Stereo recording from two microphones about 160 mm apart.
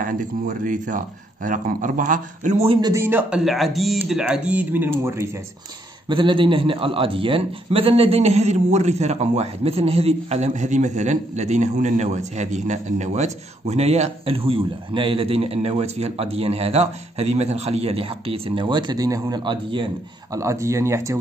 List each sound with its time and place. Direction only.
0.0 s speech: 55° right (ahead or behind)
2.8 s speech: 15° right (ahead or behind)
6.0 s a man's voice: 30° right (ahead or behind)
20.3 s speech: 20° right (ahead or behind)